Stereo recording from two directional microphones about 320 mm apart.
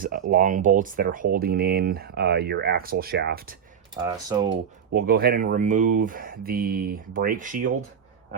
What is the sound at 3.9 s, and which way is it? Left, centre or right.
Speech, centre.